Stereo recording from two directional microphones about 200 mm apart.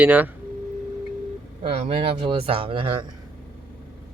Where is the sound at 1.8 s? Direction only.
30° right (ahead or behind).